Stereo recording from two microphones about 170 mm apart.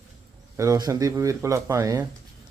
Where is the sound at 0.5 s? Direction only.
15° right (ahead or behind).